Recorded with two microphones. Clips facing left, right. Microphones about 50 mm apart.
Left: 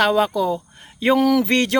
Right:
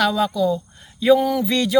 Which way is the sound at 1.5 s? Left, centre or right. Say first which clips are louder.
Left 2 dB; left.